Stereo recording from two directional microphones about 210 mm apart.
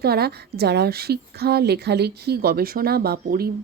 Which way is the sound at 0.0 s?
50° right (ahead or behind).